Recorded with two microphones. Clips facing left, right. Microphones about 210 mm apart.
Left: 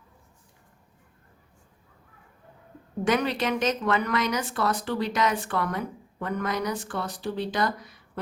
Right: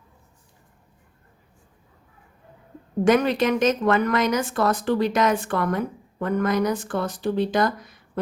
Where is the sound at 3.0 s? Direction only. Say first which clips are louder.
Right 6 dB; 45° right (ahead or behind).